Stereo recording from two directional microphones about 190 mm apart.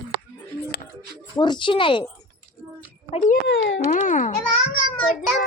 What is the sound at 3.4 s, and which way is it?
Speech, 65° left (ahead or behind).